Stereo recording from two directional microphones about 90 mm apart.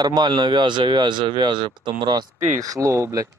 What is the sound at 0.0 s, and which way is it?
Speech, 55° right (ahead or behind).